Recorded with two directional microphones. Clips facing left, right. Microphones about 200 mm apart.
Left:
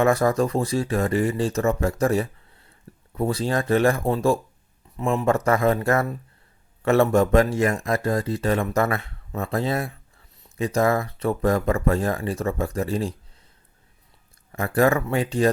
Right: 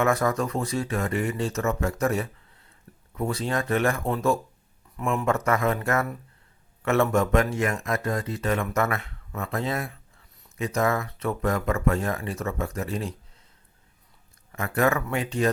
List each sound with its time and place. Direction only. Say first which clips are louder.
0.0 s speech: left 4 dB; 30° left (ahead or behind)
14.5 s speech: left 4 dB; 35° left (ahead or behind)